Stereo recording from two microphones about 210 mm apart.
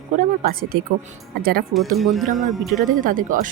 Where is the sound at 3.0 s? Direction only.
40° right (ahead or behind).